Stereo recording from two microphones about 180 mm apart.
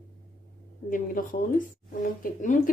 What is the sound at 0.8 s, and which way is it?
A woman's voice, 50° left (ahead or behind).